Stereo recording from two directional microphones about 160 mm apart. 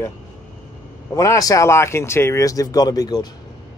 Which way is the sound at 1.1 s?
20° left (ahead or behind).